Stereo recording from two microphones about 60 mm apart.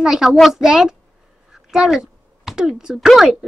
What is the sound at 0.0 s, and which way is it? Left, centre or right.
Speech, centre.